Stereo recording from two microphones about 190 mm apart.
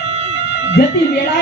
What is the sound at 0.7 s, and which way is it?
Cat, 60° left (ahead or behind).